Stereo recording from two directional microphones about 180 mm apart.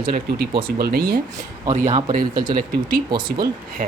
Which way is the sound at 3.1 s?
25° right (ahead or behind).